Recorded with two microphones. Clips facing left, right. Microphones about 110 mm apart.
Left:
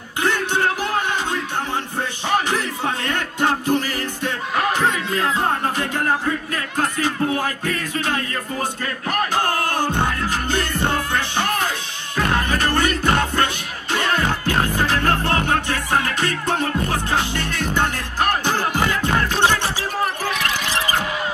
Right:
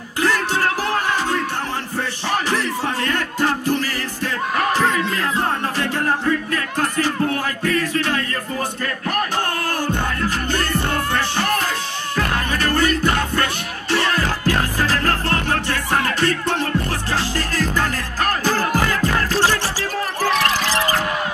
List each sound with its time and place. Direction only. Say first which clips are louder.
4.6 s a sound: right 1 dB; 40° right (ahead or behind)
7.3 s music: right 2 dB; 30° left (ahead or behind)
12.2 s music: left 2 dB; 30° left (ahead or behind)
14.5 s music: even; 25° left (ahead or behind)
17.1 s music: even; 35° right (ahead or behind)
18.9 s music: even; 25° left (ahead or behind)
20.2 s a sound: right 5 dB; 35° right (ahead or behind)